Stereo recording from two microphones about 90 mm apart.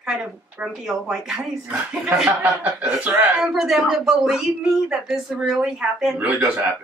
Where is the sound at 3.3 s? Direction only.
5° right (ahead or behind).